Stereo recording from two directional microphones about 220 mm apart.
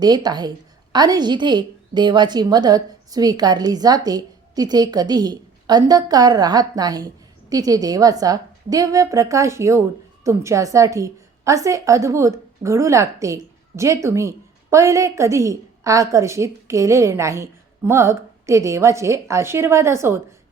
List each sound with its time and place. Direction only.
0.0 s a woman's voice: 20° right (ahead or behind)